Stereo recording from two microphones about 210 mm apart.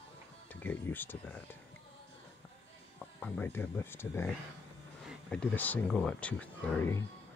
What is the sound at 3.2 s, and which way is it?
Speech, 10° left (ahead or behind).